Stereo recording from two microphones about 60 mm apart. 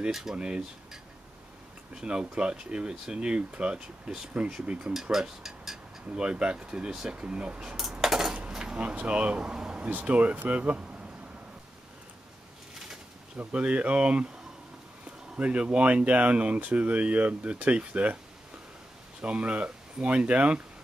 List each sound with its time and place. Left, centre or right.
0.1 s speech: centre
2.0 s speech: centre
5.1 s speech: centre
6.0 s speech: centre
7.7 s dishes: centre
8.4 s a sound: centre
9.8 s speech: right
13.4 s speech: right
19.2 s speech: centre